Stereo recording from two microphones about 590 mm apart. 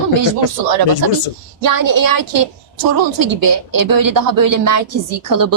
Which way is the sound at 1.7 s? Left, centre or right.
Right.